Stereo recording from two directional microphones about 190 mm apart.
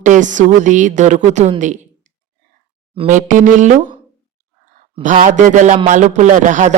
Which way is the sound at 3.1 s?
45° right (ahead or behind).